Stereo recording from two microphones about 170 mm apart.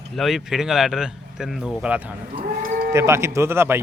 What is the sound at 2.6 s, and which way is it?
Sheep, 55° right (ahead or behind).